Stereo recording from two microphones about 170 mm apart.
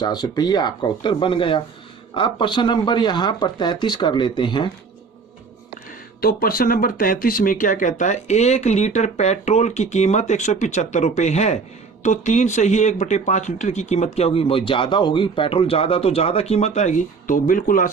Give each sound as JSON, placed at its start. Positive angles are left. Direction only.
{"t": 0.0, "sound": "speech", "side_deg": 25}
{"t": 6.2, "sound": "speech", "side_deg": 60}